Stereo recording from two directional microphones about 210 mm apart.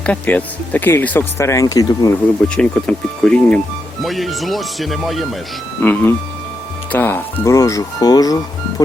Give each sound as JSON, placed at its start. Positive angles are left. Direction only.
{"t": 0.0, "sound": "speech", "side_deg": 5}
{"t": 2.6, "sound": "speech", "side_deg": 5}